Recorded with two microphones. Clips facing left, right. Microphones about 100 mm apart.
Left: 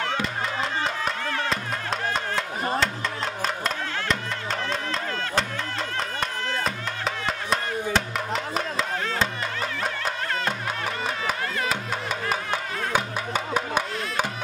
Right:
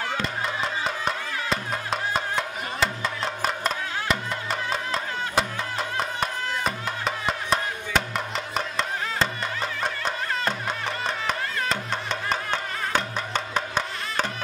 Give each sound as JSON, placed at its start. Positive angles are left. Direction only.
{"t": 0.8, "sound": "music", "side_deg": 0}
{"t": 3.4, "sound": "music", "side_deg": -5}
{"t": 6.6, "sound": "music", "side_deg": 0}